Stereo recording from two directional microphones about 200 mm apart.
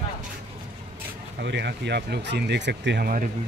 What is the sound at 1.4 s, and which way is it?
Speech, 60° right (ahead or behind).